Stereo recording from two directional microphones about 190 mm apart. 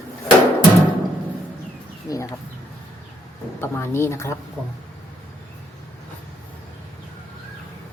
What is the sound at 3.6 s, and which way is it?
Speech, 10° left (ahead or behind).